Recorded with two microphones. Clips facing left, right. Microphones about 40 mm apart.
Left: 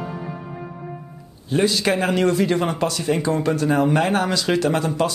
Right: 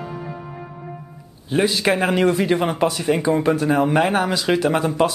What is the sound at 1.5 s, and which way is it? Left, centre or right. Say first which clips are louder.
A man's voice: right 1 dB; centre.